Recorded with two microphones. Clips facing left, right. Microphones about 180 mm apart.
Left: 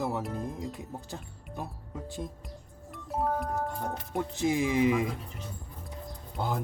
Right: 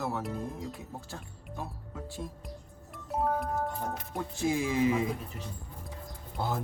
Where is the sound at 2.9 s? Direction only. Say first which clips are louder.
Even; centre (ahead or behind).